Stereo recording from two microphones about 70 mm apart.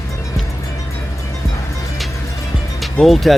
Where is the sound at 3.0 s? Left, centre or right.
Centre.